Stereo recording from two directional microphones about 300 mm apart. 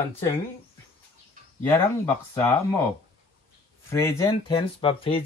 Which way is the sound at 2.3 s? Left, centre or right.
Centre.